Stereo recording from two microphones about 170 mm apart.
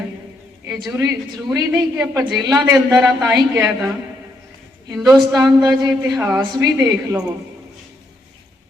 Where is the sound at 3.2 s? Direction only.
15° right (ahead or behind).